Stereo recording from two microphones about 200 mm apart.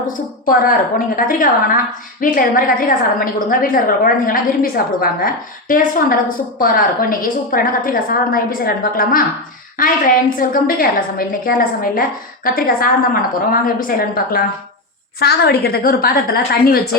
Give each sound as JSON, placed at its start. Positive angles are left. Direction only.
{"t": 0.4, "sound": "a woman's voice", "side_deg": 45}